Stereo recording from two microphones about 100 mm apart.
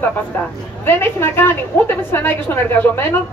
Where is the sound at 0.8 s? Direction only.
20° left (ahead or behind).